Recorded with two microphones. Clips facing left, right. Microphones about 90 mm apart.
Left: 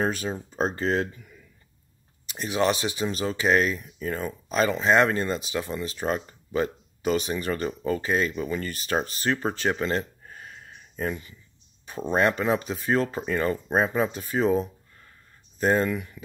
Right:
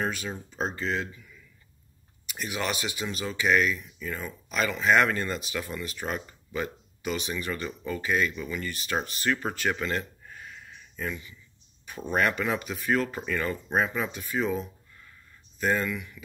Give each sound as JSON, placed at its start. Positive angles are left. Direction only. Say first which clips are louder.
{"t": 0.0, "sound": "speech", "louder": "left 4 dB", "side_deg": 35}
{"t": 2.2, "sound": "speech", "louder": "left 7 dB", "side_deg": 30}
{"t": 11.8, "sound": "speech", "louder": "left 3 dB", "side_deg": 30}